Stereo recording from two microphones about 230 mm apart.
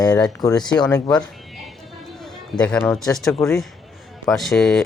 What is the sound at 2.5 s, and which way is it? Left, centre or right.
Speech, centre.